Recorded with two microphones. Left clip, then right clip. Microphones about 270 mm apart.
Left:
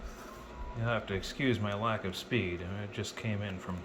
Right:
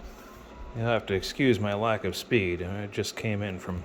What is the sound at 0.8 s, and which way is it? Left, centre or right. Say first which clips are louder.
Speech: right 7 dB; right.